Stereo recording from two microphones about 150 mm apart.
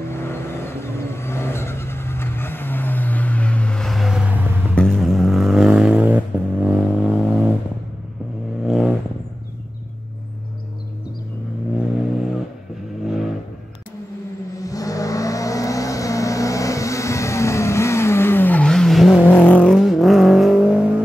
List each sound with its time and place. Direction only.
0.1 s vehicle: 15° left (ahead or behind); by 4.7 s 10° right (ahead or behind)
4.7 s vehicle: centre (ahead or behind)
8.6 s vehicle: 5° right (ahead or behind)
13.0 s vehicle: centre (ahead or behind)
14.6 s vehicle: 25° left (ahead or behind); by 19.2 s centre (ahead or behind)
19.2 s vehicle: 10° left (ahead or behind)